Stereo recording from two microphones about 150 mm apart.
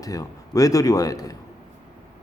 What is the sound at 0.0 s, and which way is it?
Speech, 25° left (ahead or behind).